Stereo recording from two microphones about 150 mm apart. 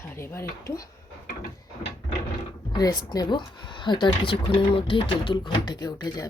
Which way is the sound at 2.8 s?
25° left (ahead or behind).